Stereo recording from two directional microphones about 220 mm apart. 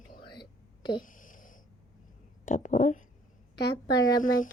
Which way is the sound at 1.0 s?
35° left (ahead or behind).